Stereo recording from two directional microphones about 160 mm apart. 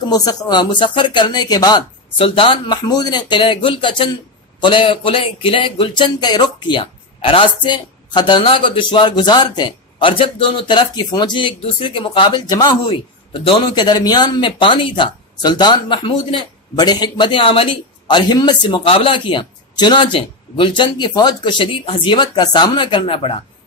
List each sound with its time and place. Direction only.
0.0 s speech: 25° left (ahead or behind)